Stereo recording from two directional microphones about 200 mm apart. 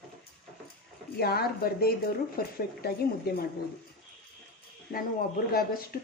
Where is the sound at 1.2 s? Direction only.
50° left (ahead or behind).